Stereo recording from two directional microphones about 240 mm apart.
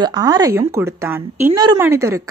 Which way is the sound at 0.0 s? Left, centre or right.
Centre.